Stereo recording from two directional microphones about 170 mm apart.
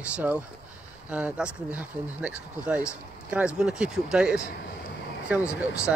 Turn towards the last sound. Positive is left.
turn(degrees=-10)  # may be behind; listen again after turning